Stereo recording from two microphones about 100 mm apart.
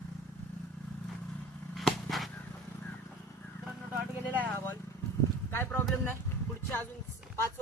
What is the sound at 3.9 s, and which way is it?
Vehicle, 20° right (ahead or behind).